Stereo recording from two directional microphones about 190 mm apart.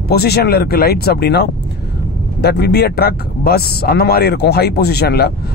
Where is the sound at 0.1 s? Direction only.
55° left (ahead or behind).